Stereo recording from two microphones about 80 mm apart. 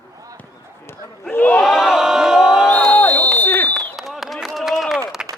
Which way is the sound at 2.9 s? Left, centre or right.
Left.